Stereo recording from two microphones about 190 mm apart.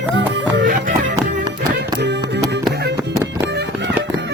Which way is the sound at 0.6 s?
40° right (ahead or behind).